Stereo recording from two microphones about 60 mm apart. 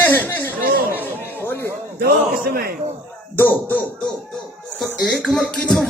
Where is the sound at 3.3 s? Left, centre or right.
Left.